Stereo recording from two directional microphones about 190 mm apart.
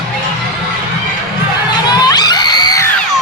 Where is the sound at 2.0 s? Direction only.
20° left (ahead or behind).